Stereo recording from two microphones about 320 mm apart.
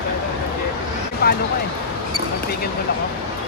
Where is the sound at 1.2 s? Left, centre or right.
Left.